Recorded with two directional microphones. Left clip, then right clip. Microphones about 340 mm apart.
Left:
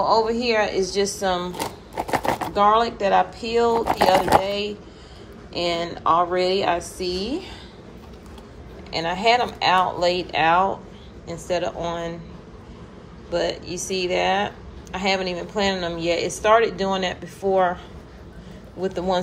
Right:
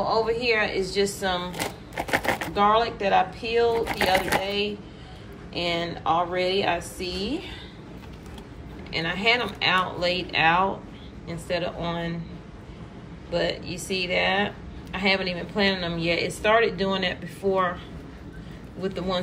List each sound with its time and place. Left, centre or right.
0.0 s speech: centre
2.0 s chopping: centre
2.5 s speech: centre
3.7 s speech: left
4.4 s speech: centre
8.9 s speech: centre
13.3 s speech: centre
18.8 s speech: centre